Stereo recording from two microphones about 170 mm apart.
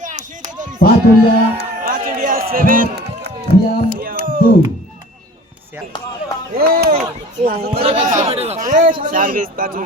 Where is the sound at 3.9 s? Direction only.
55° right (ahead or behind).